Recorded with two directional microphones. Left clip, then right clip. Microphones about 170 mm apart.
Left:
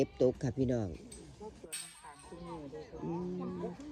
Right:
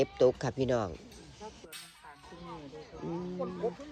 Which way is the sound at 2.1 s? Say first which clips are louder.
Right 2 dB; 25° left (ahead or behind).